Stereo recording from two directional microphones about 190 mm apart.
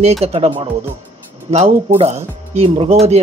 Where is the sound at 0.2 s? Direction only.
30° right (ahead or behind).